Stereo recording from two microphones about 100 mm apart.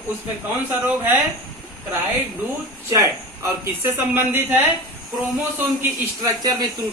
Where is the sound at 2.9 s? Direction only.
30° right (ahead or behind).